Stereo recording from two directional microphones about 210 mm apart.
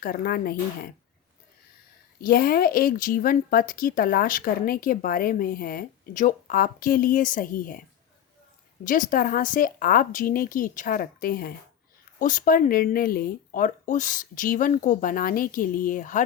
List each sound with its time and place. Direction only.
0.0 s speech: 45° left (ahead or behind)
2.2 s speech: 45° left (ahead or behind)